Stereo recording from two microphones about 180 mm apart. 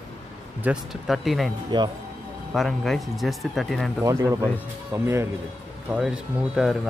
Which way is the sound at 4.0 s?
15° right (ahead or behind).